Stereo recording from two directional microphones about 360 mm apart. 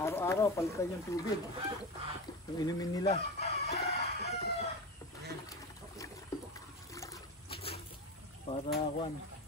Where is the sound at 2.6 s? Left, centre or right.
Centre.